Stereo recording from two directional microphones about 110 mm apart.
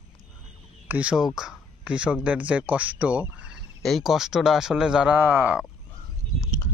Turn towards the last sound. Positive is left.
turn(degrees=30)  # may be behind; listen again after turning